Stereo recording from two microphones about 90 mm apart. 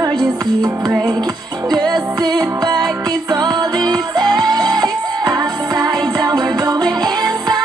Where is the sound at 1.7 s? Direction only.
50° right (ahead or behind).